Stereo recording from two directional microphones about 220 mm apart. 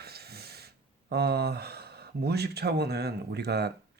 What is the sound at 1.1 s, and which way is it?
Speech, 45° right (ahead or behind).